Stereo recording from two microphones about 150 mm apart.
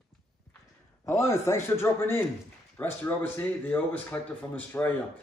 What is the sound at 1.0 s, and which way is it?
Speech, 20° left (ahead or behind).